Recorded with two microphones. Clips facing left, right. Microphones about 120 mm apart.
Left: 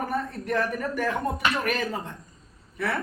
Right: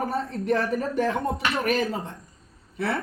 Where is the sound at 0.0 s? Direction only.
25° right (ahead or behind).